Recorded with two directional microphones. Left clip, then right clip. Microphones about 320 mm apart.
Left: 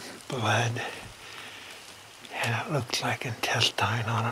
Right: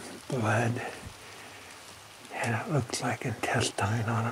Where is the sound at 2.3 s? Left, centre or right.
Centre.